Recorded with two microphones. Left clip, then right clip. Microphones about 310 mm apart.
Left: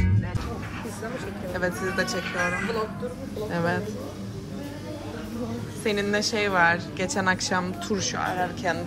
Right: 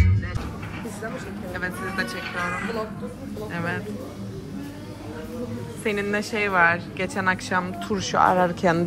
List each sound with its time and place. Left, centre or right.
1.5 s speech: centre
3.5 s speech: centre
5.9 s a woman's voice: centre
8.5 s a woman's voice: centre